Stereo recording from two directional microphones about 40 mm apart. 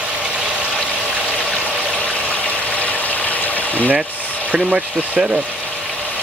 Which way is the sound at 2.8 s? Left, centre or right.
Left.